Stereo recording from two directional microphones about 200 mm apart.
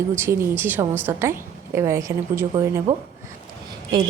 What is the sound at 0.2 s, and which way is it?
A woman's voice, 10° right (ahead or behind).